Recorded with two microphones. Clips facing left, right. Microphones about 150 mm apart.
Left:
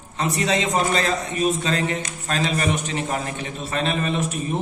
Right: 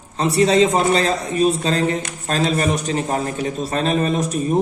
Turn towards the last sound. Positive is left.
turn(degrees=-40)  # may be behind; listen again after turning